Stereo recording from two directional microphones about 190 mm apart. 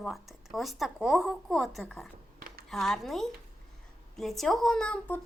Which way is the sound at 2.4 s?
50° right (ahead or behind).